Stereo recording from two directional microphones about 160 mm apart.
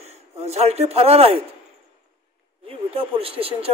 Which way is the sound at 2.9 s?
35° right (ahead or behind).